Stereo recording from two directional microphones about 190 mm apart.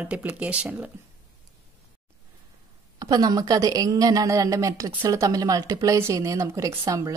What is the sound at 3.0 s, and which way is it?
A woman's voice, 20° right (ahead or behind).